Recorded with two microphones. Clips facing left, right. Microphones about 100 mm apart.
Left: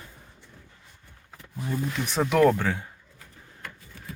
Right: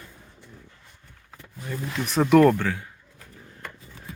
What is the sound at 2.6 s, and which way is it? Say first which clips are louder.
Speech: even; 20° left (ahead or behind).